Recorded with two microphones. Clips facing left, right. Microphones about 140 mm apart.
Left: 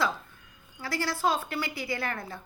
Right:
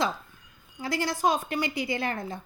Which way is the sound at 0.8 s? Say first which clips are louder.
Right 3 dB; 20° right (ahead or behind).